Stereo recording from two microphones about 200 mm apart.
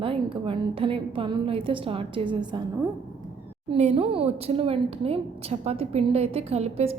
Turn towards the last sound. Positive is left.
turn(degrees=-30)  # may be behind; listen again after turning